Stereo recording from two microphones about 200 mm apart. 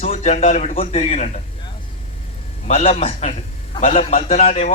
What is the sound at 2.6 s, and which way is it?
A man's voice, 30° left (ahead or behind).